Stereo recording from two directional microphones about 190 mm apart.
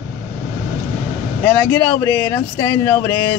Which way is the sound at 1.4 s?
10° left (ahead or behind).